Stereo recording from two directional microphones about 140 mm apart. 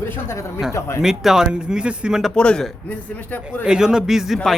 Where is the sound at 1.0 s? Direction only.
5° right (ahead or behind).